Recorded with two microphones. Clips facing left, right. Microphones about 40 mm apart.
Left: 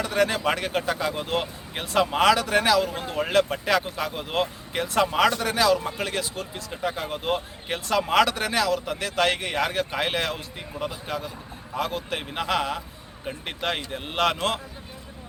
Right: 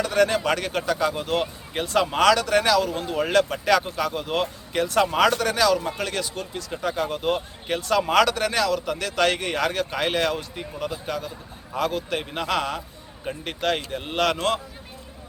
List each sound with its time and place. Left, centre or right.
0.0 s a sound: centre
0.4 s a man's voice: centre
10.8 s a man's voice: centre